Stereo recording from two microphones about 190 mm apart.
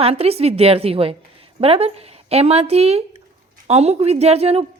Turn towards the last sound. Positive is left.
turn(degrees=-30)  # may be behind; listen again after turning